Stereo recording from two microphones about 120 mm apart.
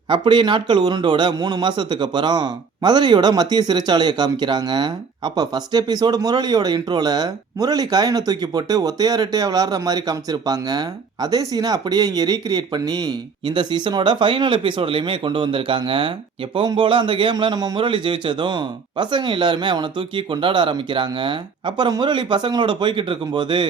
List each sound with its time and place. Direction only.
0.1 s a man's voice: 40° right (ahead or behind)